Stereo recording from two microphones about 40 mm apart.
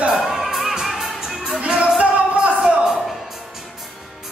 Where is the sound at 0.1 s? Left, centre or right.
Centre.